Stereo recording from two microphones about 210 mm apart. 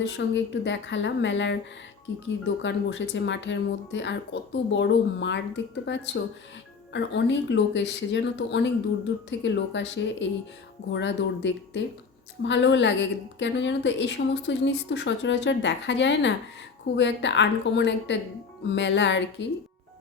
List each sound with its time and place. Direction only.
0.0 s a woman's voice: 60° left (ahead or behind)